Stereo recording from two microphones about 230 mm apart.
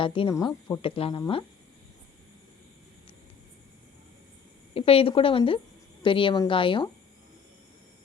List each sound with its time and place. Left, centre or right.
0.0 s speech: left
4.7 s speech: left